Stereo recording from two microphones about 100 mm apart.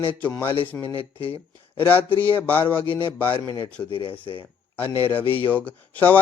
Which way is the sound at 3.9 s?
60° left (ahead or behind).